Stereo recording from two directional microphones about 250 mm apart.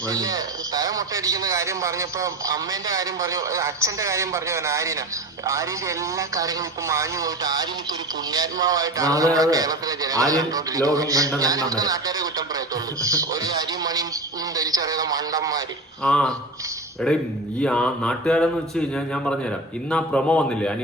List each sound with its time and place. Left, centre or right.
0.1 s a man's voice: centre
14.5 s radio: centre
16.0 s speech: centre